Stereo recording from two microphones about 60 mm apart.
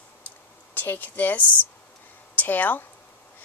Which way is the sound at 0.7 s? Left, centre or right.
Left.